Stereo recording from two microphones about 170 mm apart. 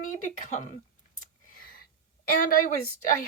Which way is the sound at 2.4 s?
55° left (ahead or behind).